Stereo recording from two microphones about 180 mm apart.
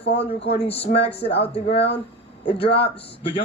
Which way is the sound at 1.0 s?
35° left (ahead or behind).